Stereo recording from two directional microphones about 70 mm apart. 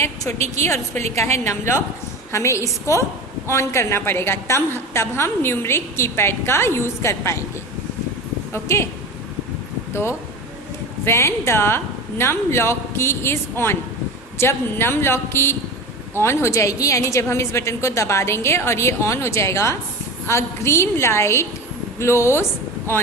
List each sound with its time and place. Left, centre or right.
0.0 s a woman's voice: left
8.5 s a woman's voice: left
9.9 s a woman's voice: left